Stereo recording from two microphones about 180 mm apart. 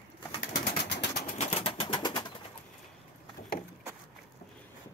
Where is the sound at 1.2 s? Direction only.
40° left (ahead or behind); by 2.3 s 25° left (ahead or behind).